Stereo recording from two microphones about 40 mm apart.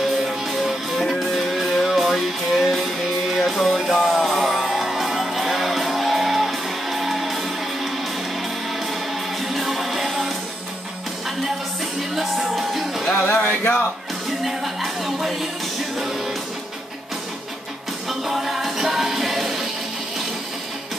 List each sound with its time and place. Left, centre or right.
0.3 s music: centre
9.4 s music: centre
12.0 s music: centre
13.3 s a sound: left
14.4 s music: centre
18.0 s music: centre